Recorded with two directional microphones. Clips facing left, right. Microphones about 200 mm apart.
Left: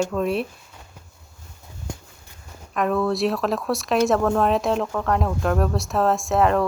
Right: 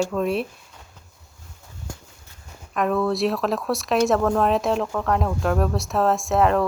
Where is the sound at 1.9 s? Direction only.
20° left (ahead or behind).